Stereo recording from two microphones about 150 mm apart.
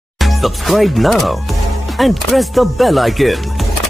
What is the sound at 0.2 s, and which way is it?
Speech, centre (ahead or behind).